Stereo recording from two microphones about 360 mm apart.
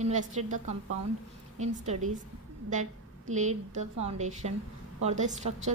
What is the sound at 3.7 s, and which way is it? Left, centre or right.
A woman's voice, centre.